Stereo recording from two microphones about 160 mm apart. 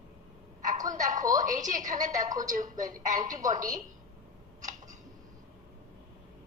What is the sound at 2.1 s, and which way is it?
Speech, 25° right (ahead or behind).